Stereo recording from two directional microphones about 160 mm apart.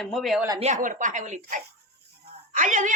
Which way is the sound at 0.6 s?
50° right (ahead or behind).